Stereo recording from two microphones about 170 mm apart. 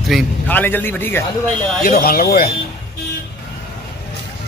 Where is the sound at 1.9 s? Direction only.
60° left (ahead or behind).